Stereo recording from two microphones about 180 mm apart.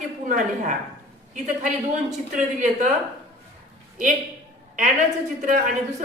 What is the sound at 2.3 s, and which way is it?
Speech, 45° right (ahead or behind).